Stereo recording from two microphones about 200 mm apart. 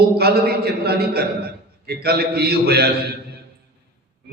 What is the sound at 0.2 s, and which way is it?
Mantra, 50° right (ahead or behind).